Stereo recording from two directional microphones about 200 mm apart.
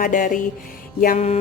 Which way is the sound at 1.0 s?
40° left (ahead or behind).